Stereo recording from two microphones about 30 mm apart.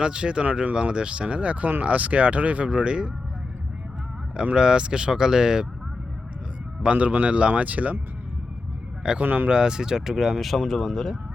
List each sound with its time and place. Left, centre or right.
0.0 s speech: right
2.6 s speech: right
4.5 s speech: right
6.9 s speech: right
7.6 s speech: right
9.2 s speech: right
9.5 s speech: right
10.7 s speech: centre